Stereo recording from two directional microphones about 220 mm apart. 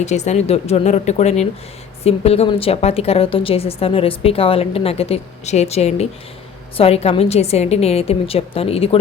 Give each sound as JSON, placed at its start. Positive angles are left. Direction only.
{"t": 0.0, "sound": "a woman's voice", "side_deg": 30}